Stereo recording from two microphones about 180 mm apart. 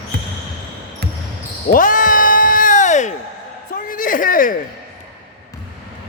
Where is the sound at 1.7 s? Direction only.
50° left (ahead or behind).